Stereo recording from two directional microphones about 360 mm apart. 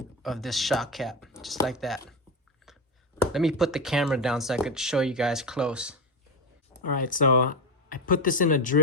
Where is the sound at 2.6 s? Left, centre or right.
Centre.